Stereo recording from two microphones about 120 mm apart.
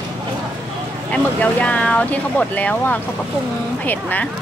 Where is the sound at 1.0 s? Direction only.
10° left (ahead or behind).